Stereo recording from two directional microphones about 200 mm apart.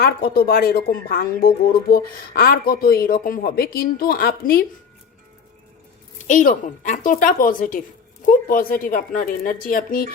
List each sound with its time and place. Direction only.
0.0 s speech: 50° left (ahead or behind)
6.2 s speech: 40° left (ahead or behind)